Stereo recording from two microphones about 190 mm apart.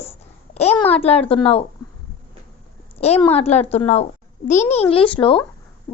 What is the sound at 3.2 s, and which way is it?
A woman's voice, 35° left (ahead or behind).